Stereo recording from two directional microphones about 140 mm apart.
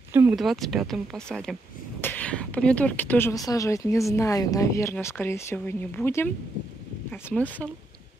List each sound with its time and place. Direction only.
0.1 s speech: 15° right (ahead or behind)
0.4 s speech: centre (ahead or behind)
2.0 s speech: 15° left (ahead or behind)